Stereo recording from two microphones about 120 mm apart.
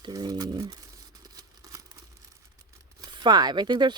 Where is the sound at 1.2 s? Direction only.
30° right (ahead or behind).